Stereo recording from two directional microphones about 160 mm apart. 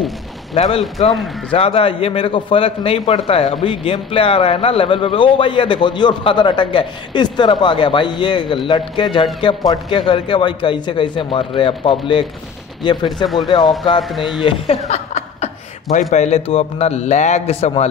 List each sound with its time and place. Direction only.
0.6 s speech: 40° left (ahead or behind)
14.1 s speech: centre (ahead or behind)
14.4 s speech: 40° left (ahead or behind)